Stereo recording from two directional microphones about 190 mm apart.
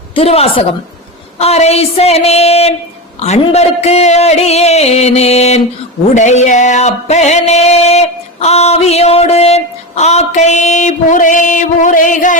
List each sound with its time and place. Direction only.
0.1 s music: 30° left (ahead or behind)